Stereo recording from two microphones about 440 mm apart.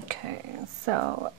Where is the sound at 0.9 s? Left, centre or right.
Right.